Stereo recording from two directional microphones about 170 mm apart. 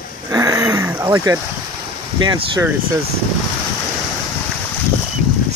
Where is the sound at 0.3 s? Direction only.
20° right (ahead or behind).